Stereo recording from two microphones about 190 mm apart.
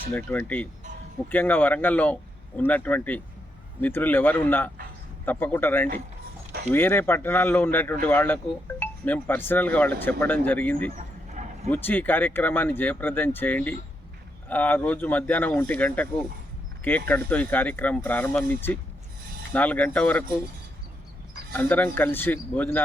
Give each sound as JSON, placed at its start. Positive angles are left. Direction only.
{"t": 0.1, "sound": "speech", "side_deg": 10}
{"t": 10.9, "sound": "bow-wow", "side_deg": -35}
{"t": 11.7, "sound": "speech", "side_deg": 10}
{"t": 21.5, "sound": "speech", "side_deg": 10}